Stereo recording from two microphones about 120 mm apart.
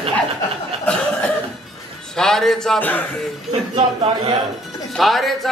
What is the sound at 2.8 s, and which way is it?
Speech, 15° left (ahead or behind).